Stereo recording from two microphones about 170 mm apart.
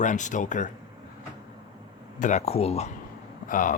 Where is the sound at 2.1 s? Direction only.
45° left (ahead or behind).